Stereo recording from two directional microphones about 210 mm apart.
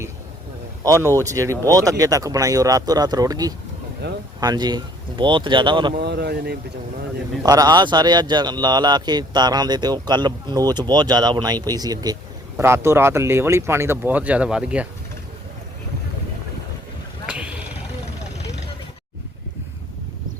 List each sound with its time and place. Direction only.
0.9 s speech: 15° right (ahead or behind)
4.0 s speech: 55° right (ahead or behind)
4.4 s speech: 20° right (ahead or behind)
5.9 s speech: 50° right (ahead or behind)
7.4 s speech: 20° right (ahead or behind)
17.2 s vehicle: 5° right (ahead or behind)